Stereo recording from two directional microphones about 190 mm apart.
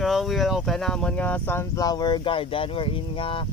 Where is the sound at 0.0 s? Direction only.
Centre (ahead or behind).